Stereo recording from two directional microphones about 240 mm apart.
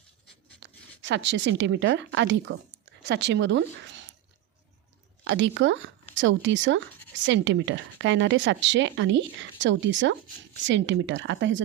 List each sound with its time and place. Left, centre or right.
0.6 s speech: right
5.2 s speech: right